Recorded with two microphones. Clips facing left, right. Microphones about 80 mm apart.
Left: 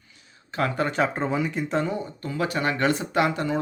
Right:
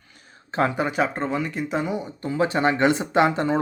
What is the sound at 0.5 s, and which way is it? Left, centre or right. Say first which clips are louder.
Speech: right 4 dB; right.